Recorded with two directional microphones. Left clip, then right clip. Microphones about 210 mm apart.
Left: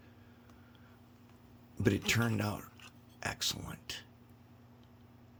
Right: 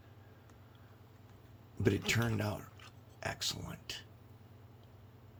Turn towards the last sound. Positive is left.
turn(degrees=20)  # may be behind; listen again after turning